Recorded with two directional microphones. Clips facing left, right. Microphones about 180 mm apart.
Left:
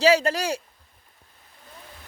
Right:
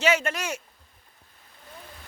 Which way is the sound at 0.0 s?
35° left (ahead or behind).